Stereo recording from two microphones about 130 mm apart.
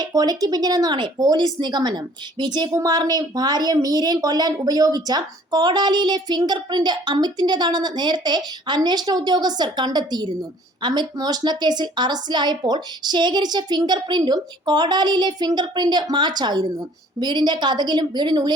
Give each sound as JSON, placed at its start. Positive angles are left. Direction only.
{"t": 0.0, "sound": "speech", "side_deg": -30}